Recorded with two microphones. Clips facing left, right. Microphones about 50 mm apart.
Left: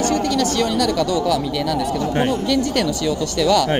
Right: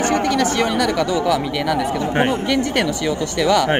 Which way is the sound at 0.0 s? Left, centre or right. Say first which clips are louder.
Right 1 dB; right.